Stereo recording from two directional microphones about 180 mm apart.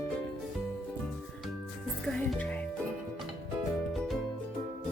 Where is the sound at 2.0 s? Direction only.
5° left (ahead or behind).